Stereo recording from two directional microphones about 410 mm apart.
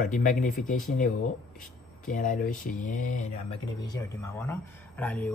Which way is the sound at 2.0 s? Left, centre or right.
Centre.